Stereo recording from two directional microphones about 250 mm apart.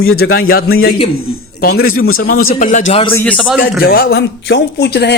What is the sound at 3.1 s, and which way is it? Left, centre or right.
Speech, centre.